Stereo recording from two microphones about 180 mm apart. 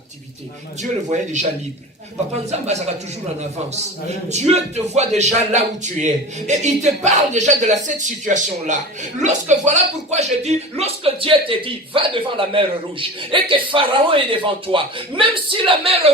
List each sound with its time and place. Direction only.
0.8 s speech: 40° right (ahead or behind)
4.3 s a man's voice: 40° right (ahead or behind)